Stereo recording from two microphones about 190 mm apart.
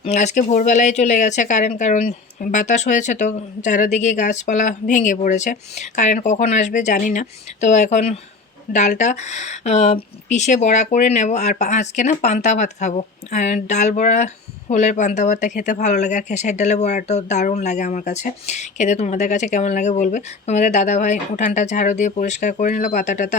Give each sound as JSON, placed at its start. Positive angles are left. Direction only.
{"t": 0.0, "sound": "speech", "side_deg": 35}